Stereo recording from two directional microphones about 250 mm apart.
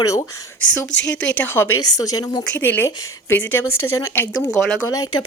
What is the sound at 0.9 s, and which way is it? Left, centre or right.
Speech, left.